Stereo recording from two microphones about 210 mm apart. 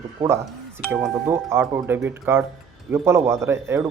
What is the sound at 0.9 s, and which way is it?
Speech, 5° right (ahead or behind).